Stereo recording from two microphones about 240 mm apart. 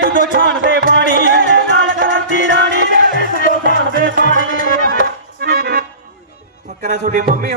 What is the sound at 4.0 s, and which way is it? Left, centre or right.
Music, right.